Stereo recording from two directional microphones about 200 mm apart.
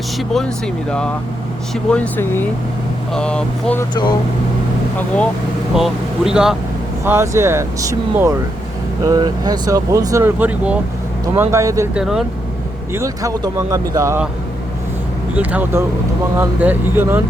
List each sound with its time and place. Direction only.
0.2 s speech: 5° left (ahead or behind)
4.9 s speech: 5° left (ahead or behind)
7.0 s speech: 10° right (ahead or behind)
11.9 s speech: centre (ahead or behind)
12.9 s speech: 15° right (ahead or behind)
15.4 s speech: 10° right (ahead or behind)